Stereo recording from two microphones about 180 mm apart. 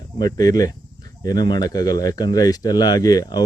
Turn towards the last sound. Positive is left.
turn(degrees=20)  # may be behind; listen again after turning